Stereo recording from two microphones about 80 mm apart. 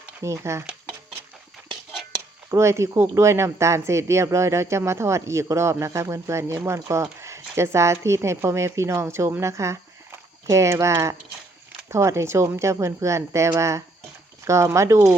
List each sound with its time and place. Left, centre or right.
0.2 s speech: right
2.5 s speech: right